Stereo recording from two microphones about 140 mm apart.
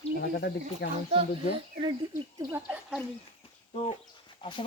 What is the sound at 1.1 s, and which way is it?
Speech, 50° right (ahead or behind).